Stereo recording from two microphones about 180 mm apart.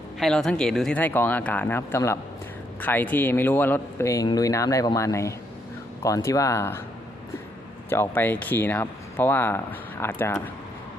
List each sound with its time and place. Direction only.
0.2 s speech: centre (ahead or behind)
7.9 s speech: 15° left (ahead or behind)